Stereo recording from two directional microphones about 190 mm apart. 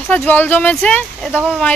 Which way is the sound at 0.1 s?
10° left (ahead or behind).